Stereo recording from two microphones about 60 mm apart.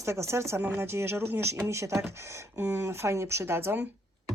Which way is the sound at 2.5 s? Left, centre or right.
Right.